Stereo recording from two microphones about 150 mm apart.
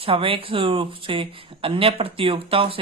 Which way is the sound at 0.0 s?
35° right (ahead or behind).